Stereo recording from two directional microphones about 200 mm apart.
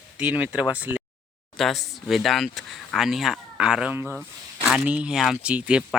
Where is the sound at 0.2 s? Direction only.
5° right (ahead or behind).